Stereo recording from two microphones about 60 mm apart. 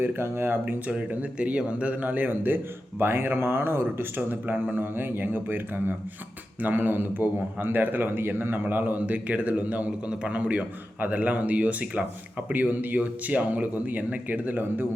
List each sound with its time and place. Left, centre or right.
0.0 s speech: right
0.9 s a man's voice: right